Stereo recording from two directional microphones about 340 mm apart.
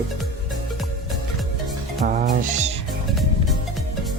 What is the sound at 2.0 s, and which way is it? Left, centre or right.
Music, right.